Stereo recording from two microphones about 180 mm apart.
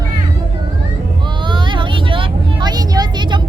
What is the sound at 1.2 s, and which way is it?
Vehicle, 25° right (ahead or behind).